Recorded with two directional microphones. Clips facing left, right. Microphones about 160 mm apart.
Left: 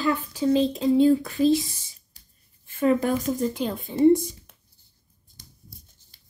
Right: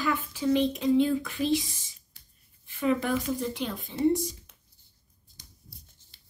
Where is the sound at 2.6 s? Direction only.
45° left (ahead or behind).